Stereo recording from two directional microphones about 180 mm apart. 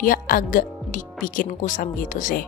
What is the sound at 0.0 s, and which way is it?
Speech, 50° left (ahead or behind).